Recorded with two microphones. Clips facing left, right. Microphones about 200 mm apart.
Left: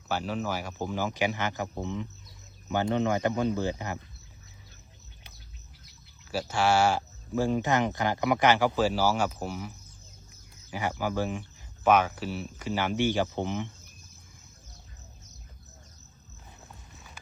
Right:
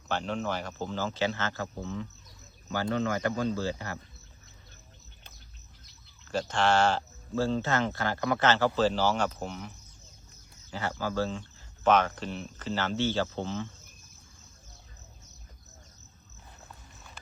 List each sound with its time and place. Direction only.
0.1 s speech: 5° left (ahead or behind)
6.2 s speech: 10° left (ahead or behind)